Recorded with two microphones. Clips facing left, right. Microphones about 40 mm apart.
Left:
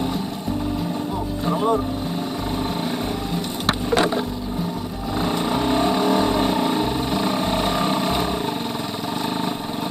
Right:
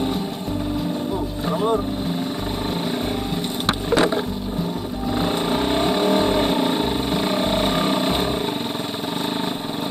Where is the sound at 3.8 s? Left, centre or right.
Right.